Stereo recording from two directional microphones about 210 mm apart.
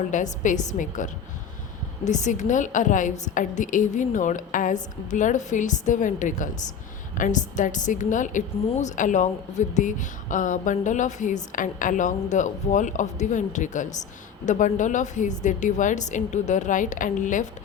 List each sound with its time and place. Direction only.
0.1 s a woman's voice: 35° left (ahead or behind)